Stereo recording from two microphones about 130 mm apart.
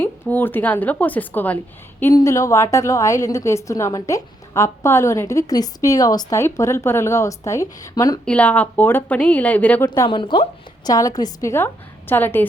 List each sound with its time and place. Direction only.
0.0 s a woman's voice: 15° left (ahead or behind)
8.2 s speech: 10° left (ahead or behind)
10.1 s speech: 40° left (ahead or behind)
10.8 s a woman's voice: 30° left (ahead or behind)